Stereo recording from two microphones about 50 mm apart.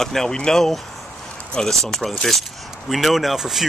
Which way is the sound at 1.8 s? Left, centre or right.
Centre.